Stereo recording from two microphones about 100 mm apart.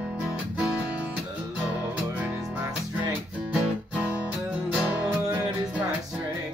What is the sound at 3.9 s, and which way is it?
Music, 15° right (ahead or behind).